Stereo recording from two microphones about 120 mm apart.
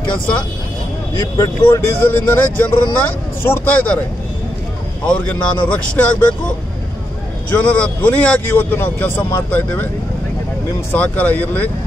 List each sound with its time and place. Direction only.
1.7 s a man's voice: 15° left (ahead or behind)
5.0 s a man's voice: 10° left (ahead or behind)
7.5 s a man's voice: 10° left (ahead or behind)
10.9 s a man's voice: 15° left (ahead or behind)